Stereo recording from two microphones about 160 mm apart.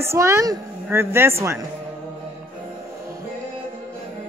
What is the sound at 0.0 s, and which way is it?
Speech, 15° right (ahead or behind).